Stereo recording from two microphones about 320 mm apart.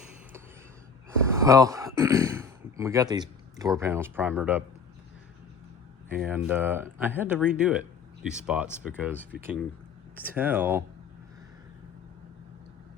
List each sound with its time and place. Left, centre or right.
1.4 s speech: centre
6.1 s speech: centre